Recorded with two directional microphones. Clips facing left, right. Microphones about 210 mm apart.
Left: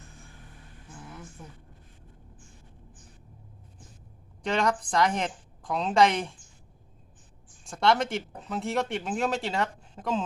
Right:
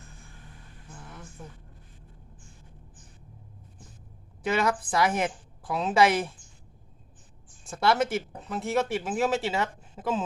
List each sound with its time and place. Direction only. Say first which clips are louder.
4.4 s speech: right 1 dB; 5° right (ahead or behind)
7.6 s speech: even; 5° right (ahead or behind)